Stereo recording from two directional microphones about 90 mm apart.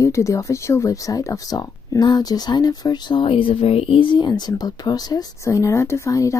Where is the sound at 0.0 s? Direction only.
35° left (ahead or behind).